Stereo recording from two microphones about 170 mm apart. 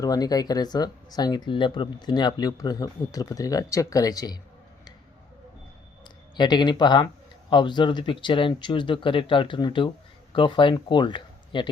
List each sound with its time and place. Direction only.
0.0 s speech: 20° left (ahead or behind)
6.3 s speech: 25° left (ahead or behind)